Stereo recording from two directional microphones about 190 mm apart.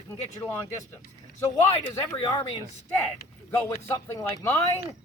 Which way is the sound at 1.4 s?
15° left (ahead or behind).